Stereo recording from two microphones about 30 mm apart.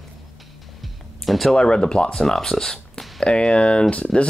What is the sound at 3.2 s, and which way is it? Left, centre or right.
Speech, left.